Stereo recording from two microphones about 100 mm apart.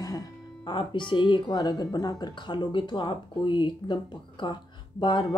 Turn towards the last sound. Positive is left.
turn(degrees=50)  # may be behind; listen again after turning